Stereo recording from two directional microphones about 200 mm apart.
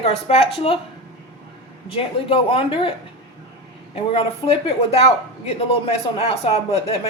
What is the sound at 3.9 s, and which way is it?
Speech, 30° left (ahead or behind).